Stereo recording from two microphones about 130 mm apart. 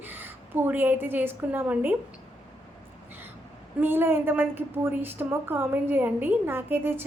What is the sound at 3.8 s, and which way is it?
A woman's voice, 15° right (ahead or behind).